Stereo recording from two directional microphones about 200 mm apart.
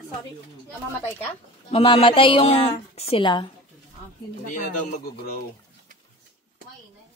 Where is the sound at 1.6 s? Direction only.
30° left (ahead or behind).